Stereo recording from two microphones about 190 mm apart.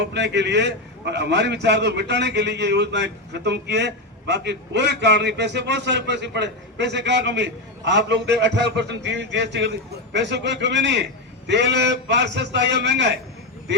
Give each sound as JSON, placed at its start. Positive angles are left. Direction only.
{"t": 0.0, "sound": "a man's voice", "side_deg": -65}